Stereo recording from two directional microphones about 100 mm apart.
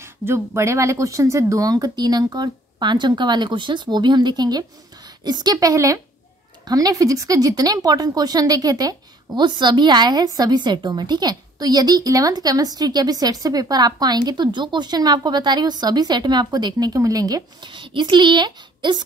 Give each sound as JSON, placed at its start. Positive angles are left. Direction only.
{"t": 0.0, "sound": "speech", "side_deg": -25}
{"t": 17.6, "sound": "speech", "side_deg": -55}